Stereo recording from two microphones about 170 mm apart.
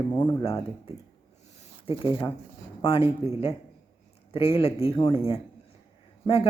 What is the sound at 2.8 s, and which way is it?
Speech, 30° left (ahead or behind).